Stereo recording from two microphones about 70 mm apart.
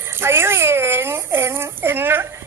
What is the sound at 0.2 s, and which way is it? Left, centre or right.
A child's voice, right.